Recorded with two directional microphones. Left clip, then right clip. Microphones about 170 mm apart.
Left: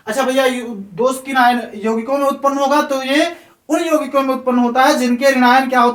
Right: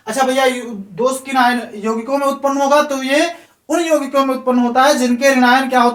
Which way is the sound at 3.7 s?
25° left (ahead or behind).